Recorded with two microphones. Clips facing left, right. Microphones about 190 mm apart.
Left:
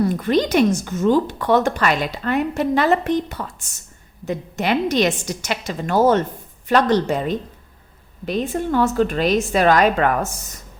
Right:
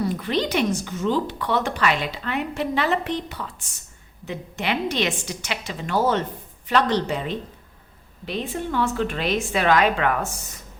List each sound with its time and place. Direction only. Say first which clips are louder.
0.0 s a woman's voice: left 6 dB; 45° left (ahead or behind)